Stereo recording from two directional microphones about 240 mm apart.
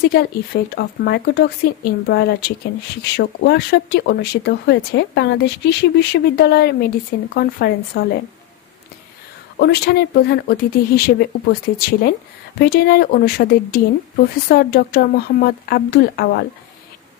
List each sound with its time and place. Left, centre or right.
0.0 s speech: left
9.6 s speech: left